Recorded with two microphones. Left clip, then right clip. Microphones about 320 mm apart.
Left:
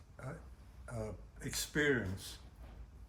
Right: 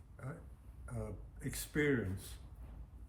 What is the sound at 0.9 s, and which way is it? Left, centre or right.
Speech, centre.